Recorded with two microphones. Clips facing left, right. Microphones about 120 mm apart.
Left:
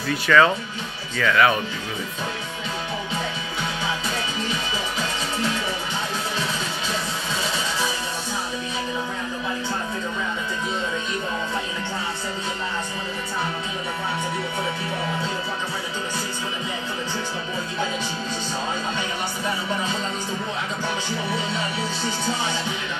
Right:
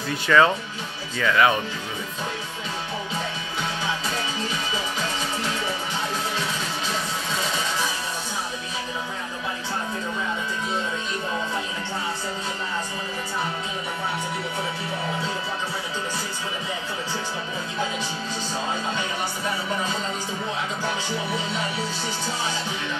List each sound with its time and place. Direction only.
0.1 s speech: 20° right (ahead or behind)